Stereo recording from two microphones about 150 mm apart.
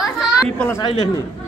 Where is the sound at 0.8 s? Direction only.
35° left (ahead or behind).